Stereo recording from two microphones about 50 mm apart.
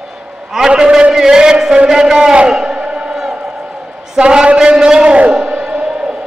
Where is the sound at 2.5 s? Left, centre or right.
Centre.